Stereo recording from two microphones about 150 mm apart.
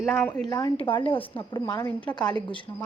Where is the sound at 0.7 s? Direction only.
35° left (ahead or behind).